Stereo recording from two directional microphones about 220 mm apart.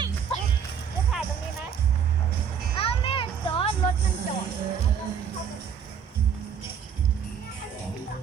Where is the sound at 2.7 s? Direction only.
25° left (ahead or behind).